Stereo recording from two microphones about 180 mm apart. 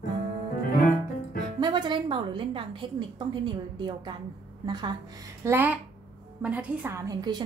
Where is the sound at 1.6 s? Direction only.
25° right (ahead or behind).